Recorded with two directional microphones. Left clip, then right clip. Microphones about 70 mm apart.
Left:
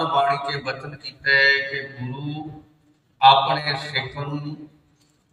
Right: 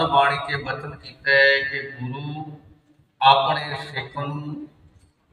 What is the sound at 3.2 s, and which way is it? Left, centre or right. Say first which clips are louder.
Mantra: left 1 dB; left.